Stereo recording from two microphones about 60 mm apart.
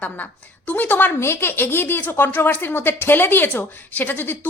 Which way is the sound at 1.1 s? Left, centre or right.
Left.